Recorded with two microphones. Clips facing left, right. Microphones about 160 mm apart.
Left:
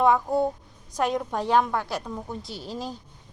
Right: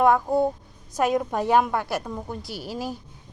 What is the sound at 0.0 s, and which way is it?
A woman's voice, centre (ahead or behind).